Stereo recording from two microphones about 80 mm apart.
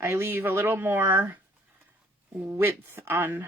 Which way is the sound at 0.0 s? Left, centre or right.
Right.